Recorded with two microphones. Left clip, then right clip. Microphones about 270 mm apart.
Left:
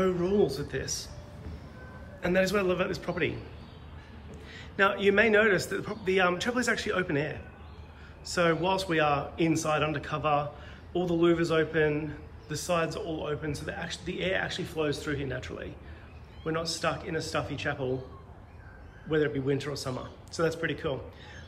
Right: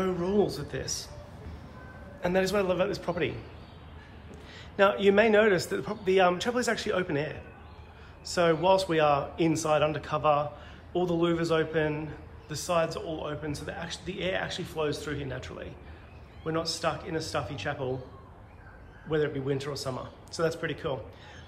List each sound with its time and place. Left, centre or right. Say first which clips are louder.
0.0 s a man's voice: left 1 dB; centre
2.2 s a man's voice: even; centre
4.6 s a man's voice: right 2 dB; centre
19.0 s a man's voice: left 1 dB; centre